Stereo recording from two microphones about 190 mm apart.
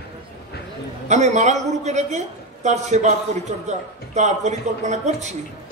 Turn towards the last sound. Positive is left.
turn(degrees=-35)  # may be behind; listen again after turning